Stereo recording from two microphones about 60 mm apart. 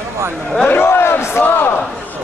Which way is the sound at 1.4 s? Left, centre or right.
Left.